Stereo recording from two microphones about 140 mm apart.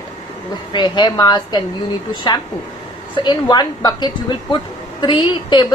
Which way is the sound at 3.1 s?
35° left (ahead or behind).